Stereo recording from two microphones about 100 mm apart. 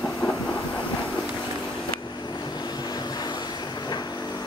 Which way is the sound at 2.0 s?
45° left (ahead or behind).